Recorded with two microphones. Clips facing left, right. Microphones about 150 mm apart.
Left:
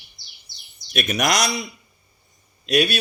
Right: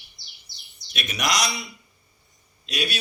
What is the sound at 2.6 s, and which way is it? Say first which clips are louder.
Speech: left 10 dB; 55° left (ahead or behind).